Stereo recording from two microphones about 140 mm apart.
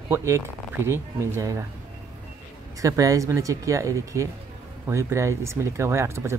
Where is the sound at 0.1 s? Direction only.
20° right (ahead or behind).